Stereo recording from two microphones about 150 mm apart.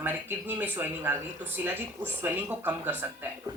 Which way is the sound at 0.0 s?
15° right (ahead or behind).